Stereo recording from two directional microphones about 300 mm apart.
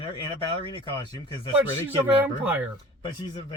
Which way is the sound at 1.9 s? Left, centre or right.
Centre.